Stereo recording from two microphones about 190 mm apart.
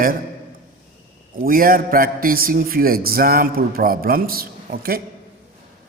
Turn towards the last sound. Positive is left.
turn(degrees=-50)  # may be behind; listen again after turning